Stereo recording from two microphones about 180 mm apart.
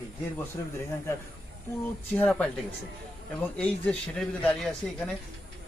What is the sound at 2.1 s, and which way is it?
Speech, 5° left (ahead or behind).